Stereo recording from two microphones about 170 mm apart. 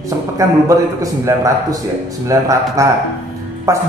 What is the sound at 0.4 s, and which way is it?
Speech, 15° right (ahead or behind).